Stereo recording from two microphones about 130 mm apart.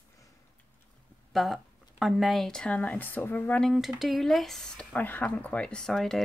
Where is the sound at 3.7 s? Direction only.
Centre (ahead or behind).